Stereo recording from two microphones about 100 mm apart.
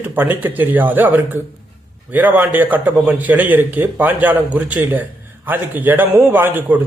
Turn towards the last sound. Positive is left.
turn(degrees=-20)  # may be behind; listen again after turning